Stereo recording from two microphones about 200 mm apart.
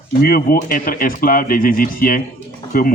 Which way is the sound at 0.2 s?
45° left (ahead or behind).